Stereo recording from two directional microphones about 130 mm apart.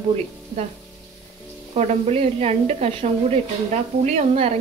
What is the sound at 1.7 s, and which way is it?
Speech, 55° right (ahead or behind).